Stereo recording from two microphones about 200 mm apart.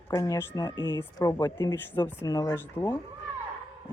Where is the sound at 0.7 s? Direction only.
20° right (ahead or behind).